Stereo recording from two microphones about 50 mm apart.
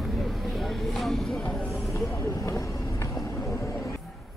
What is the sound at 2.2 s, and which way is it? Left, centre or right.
Vehicle, left.